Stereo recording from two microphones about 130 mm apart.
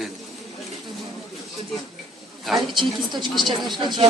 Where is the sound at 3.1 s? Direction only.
35° right (ahead or behind).